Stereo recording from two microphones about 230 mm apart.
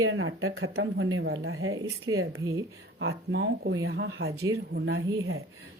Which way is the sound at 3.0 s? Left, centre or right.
Right.